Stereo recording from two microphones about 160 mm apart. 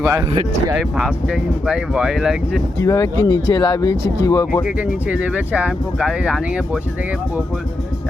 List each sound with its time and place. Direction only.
0.0 s speech: 15° right (ahead or behind)
0.8 s speech: centre (ahead or behind)
2.8 s speech: 20° left (ahead or behind)
4.6 s speech: 10° right (ahead or behind)